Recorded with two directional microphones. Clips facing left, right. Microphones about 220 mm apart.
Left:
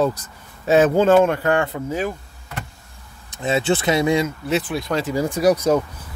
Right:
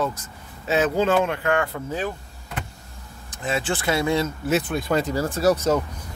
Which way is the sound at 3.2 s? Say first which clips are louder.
Left 6 dB; 25° left (ahead or behind).